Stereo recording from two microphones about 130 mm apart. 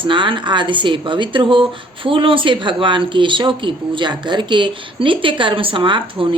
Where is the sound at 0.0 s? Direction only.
40° right (ahead or behind).